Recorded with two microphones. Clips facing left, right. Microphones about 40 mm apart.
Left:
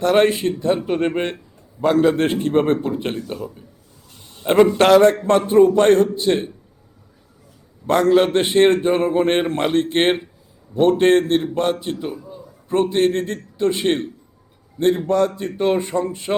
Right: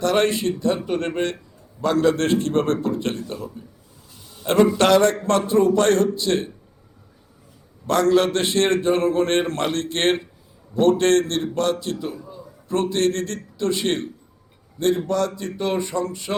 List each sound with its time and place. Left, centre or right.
0.0 s a man's voice: left
4.2 s a sound: left
4.4 s a man's voice: left
7.9 s a man's voice: left